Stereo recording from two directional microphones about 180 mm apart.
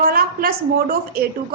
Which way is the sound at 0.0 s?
55° right (ahead or behind).